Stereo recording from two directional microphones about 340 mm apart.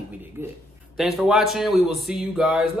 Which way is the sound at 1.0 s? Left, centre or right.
Centre.